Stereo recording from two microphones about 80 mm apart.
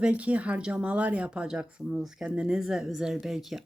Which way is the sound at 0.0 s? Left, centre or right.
Centre.